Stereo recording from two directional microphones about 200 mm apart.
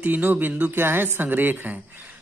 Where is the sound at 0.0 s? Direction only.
10° right (ahead or behind).